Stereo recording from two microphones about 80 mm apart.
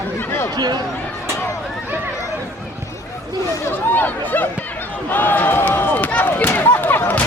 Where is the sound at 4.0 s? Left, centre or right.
Left.